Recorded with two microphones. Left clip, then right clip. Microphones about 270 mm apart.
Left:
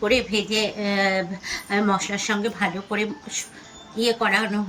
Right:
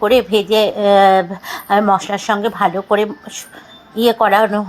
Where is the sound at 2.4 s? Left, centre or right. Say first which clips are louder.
Right 10 dB; right.